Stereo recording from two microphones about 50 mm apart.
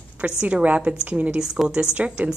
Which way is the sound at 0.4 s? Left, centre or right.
Right.